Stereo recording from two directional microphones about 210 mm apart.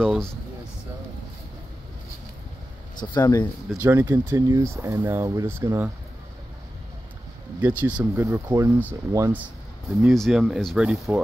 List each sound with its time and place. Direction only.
0.0 s speech: 5° left (ahead or behind)
3.0 s speech: 20° left (ahead or behind)
3.8 s speech: 10° right (ahead or behind)
7.6 s speech: 10° right (ahead or behind)
10.0 s speech: centre (ahead or behind)